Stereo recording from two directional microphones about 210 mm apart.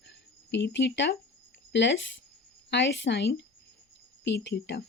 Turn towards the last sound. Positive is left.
turn(degrees=55)  # may be behind; listen again after turning